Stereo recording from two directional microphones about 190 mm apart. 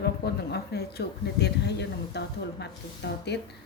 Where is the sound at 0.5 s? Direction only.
60° left (ahead or behind).